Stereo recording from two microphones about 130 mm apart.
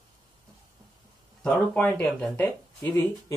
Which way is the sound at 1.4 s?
10° left (ahead or behind).